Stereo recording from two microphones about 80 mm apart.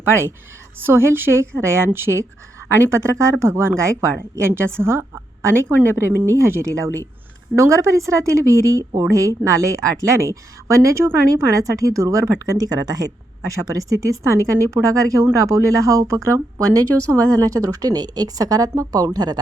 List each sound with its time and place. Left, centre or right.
0.0 s speech: right
4.8 s speech: right